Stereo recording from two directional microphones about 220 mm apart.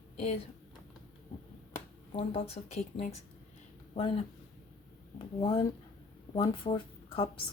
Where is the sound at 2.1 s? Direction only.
25° left (ahead or behind).